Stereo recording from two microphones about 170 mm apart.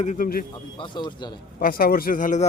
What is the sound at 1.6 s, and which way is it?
Speech, 60° left (ahead or behind).